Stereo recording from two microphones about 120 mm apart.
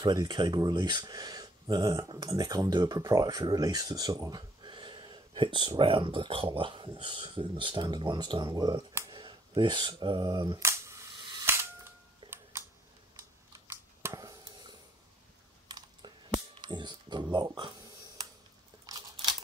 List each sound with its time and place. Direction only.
0.0 s speech: 35° right (ahead or behind)
9.1 s speech: 45° right (ahead or behind)
10.6 s cap gun: 25° right (ahead or behind)
12.2 s a sound: 40° right (ahead or behind)
13.5 s chewing: 25° right (ahead or behind)
15.7 s clicking: 35° right (ahead or behind)
16.6 s a sound: 40° right (ahead or behind)
18.9 s crunch: 30° right (ahead or behind)